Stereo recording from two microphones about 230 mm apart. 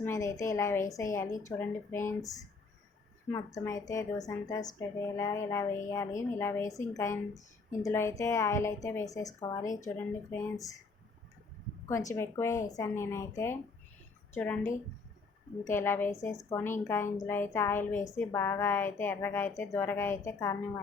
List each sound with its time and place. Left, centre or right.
0.0 s a woman's voice: centre
3.3 s a woman's voice: centre
11.9 s a woman's voice: centre
15.6 s a woman's voice: centre